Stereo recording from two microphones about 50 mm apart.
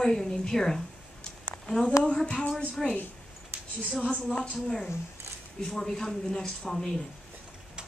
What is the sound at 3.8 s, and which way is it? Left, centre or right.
Speech, centre.